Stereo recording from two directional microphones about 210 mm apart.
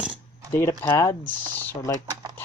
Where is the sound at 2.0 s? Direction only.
20° right (ahead or behind).